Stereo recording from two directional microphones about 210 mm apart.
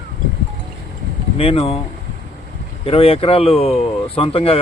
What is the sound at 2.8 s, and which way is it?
Speech, 25° left (ahead or behind).